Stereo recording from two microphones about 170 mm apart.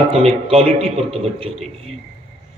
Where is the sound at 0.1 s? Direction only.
35° right (ahead or behind).